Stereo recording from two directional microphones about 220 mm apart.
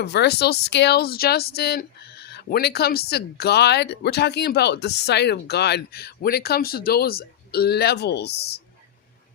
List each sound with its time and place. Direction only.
0.0 s speech: 50° left (ahead or behind)